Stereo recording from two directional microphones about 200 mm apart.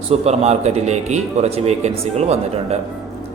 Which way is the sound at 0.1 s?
35° right (ahead or behind).